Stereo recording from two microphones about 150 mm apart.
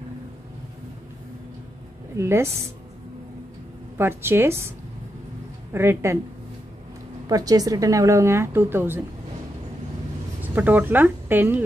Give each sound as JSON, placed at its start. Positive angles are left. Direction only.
{"t": 2.1, "sound": "a woman's voice", "side_deg": -15}
{"t": 4.0, "sound": "a woman's voice", "side_deg": -15}
{"t": 7.2, "sound": "a woman's voice", "side_deg": -25}
{"t": 10.4, "sound": "speech", "side_deg": -10}